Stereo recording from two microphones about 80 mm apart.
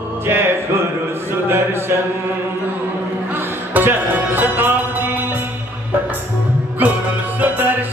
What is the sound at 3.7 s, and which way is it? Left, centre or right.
Music, right.